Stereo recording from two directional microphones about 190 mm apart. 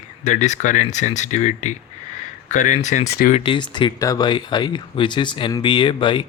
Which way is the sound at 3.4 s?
25° left (ahead or behind).